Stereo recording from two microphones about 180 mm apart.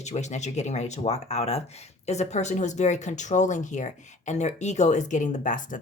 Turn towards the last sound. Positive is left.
turn(degrees=45)  # may be behind; listen again after turning